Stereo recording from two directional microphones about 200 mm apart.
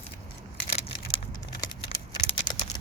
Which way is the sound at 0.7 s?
30° left (ahead or behind).